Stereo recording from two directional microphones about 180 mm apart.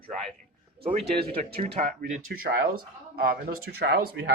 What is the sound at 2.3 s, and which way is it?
Speech, 55° right (ahead or behind).